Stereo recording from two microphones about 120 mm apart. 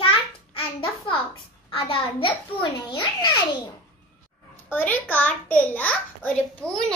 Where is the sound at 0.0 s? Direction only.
50° left (ahead or behind).